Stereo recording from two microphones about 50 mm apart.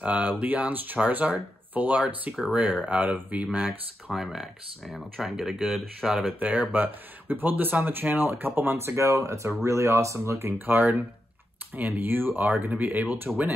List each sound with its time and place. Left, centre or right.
0.0 s speech: right
4.1 s speech: centre
6.4 s speech: right
9.7 s speech: right
10.6 s speech: right